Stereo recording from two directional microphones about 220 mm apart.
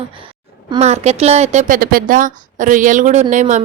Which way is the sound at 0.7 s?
30° right (ahead or behind).